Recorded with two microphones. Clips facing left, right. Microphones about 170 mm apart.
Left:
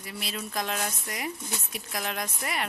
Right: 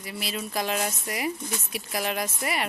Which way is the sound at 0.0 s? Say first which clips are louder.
Right 3 dB; centre (ahead or behind).